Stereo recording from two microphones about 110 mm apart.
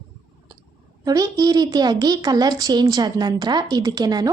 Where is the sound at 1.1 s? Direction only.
35° right (ahead or behind).